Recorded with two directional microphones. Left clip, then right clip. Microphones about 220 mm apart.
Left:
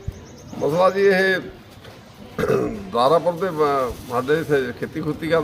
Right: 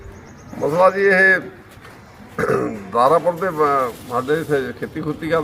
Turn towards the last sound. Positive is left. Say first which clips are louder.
# even
turn(degrees=0)  # may be behind; listen again after turning